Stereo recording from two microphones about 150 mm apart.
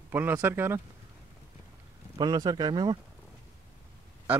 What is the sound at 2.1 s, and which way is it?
Speech, 25° right (ahead or behind).